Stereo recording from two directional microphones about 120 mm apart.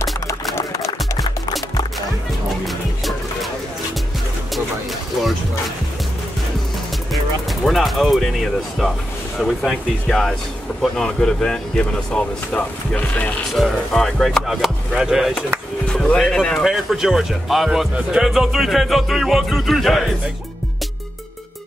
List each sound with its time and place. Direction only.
0.0 s music: 25° left (ahead or behind)
7.6 s speech: centre (ahead or behind)
13.5 s speech: centre (ahead or behind)